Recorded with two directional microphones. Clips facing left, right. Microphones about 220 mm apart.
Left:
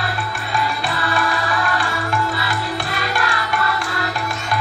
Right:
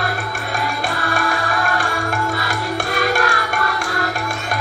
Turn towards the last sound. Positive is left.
turn(degrees=-45)  # may be behind; listen again after turning